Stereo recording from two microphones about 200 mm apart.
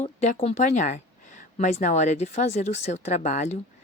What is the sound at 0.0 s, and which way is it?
Speech, 35° left (ahead or behind).